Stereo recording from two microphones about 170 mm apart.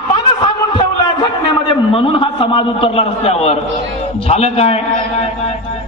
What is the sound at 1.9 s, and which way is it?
A man's voice, 30° left (ahead or behind).